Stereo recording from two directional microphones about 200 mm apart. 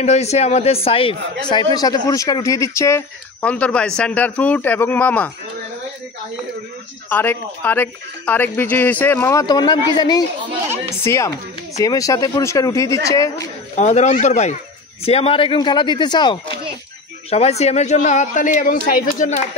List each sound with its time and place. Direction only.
0.0 s a man's voice: 35° left (ahead or behind); by 5.3 s 5° left (ahead or behind)
7.1 s speech: 10° left (ahead or behind)
13.7 s a man's voice: 35° left (ahead or behind)
17.3 s a man's voice: 30° left (ahead or behind)